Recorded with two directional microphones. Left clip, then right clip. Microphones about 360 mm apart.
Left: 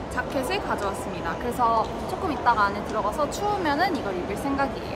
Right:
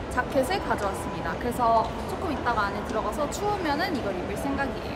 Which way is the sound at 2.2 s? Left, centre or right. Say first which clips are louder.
Left 5 dB; centre.